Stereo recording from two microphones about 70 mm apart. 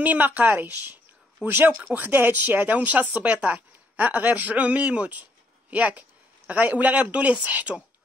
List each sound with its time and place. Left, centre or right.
0.0 s speech: right